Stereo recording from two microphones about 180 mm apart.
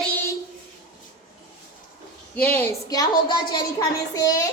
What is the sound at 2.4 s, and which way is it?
A woman's voice, 10° left (ahead or behind).